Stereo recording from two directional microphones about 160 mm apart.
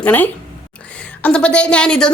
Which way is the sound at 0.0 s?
10° left (ahead or behind).